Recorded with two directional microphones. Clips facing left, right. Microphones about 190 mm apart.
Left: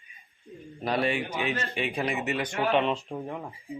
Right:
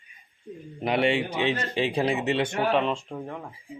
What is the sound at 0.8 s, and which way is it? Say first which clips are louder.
A man's voice: right 4 dB; 20° right (ahead or behind).